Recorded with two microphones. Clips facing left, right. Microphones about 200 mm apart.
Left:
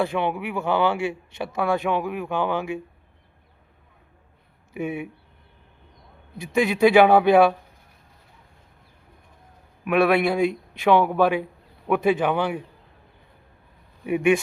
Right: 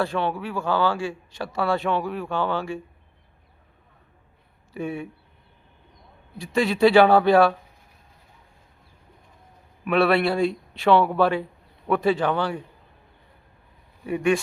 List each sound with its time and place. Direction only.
0.0 s a man's voice: 20° left (ahead or behind)
4.7 s a man's voice: 20° left (ahead or behind)
6.3 s speech: 20° left (ahead or behind)
9.8 s speech: 15° left (ahead or behind)